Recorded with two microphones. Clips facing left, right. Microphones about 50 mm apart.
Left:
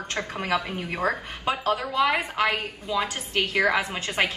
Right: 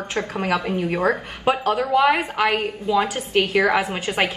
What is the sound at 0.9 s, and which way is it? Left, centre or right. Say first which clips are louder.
Speech: right 2 dB; right.